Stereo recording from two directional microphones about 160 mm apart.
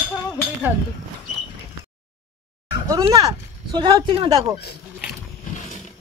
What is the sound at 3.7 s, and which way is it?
Speech, 30° right (ahead or behind).